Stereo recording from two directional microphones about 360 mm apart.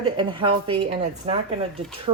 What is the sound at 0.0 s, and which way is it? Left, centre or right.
A woman's voice, centre.